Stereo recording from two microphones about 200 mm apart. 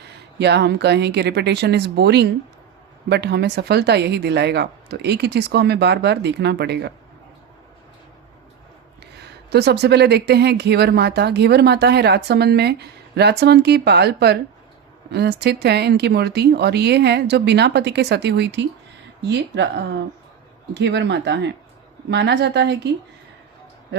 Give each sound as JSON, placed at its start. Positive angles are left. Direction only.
{"t": 0.3, "sound": "speech", "side_deg": -55}
{"t": 9.2, "sound": "speech", "side_deg": -55}